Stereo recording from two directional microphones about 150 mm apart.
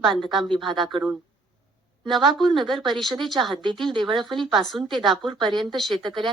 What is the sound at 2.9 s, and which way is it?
Speech, centre (ahead or behind).